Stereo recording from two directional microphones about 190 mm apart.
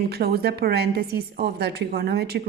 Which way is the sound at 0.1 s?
55° right (ahead or behind).